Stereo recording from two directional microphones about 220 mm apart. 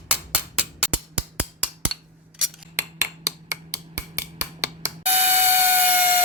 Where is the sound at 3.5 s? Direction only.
10° right (ahead or behind).